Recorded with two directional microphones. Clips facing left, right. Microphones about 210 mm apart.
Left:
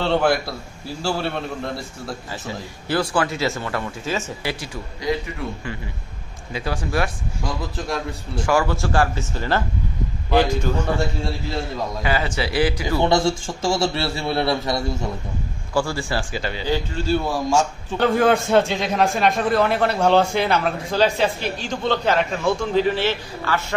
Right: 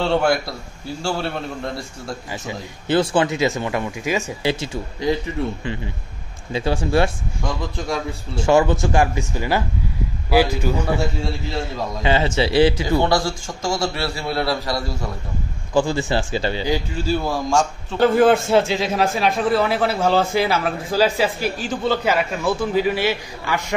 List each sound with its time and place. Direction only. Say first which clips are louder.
0.0 s a man's voice: right 1 dB; centre (ahead or behind)
2.4 s speech: right 2 dB; 20° right (ahead or behind)
6.5 s speech: right 5 dB; 25° right (ahead or behind)
7.4 s a man's voice: right 2 dB; 5° left (ahead or behind)
8.4 s a man's voice: right 4 dB; 25° right (ahead or behind); by 11.6 s centre (ahead or behind)
12.0 s speech: right 6 dB; 25° right (ahead or behind)
13.0 s a man's voice: left 1 dB; 25° left (ahead or behind)
15.7 s speech: right 4 dB; 20° right (ahead or behind)
16.6 s a man's voice: right 1 dB; 10° right (ahead or behind)
17.1 s a man's voice: even; centre (ahead or behind)